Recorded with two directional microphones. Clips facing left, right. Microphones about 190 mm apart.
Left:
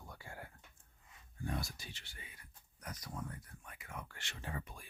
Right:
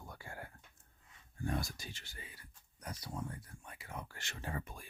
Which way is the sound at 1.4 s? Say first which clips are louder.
Right 3 dB; 50° right (ahead or behind).